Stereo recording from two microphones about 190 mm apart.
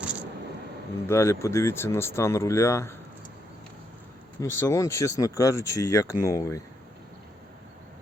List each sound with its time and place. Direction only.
1.0 s speech: 15° left (ahead or behind)
4.4 s speech: 15° left (ahead or behind)